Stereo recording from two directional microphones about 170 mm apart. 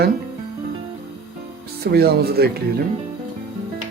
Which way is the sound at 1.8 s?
65° right (ahead or behind).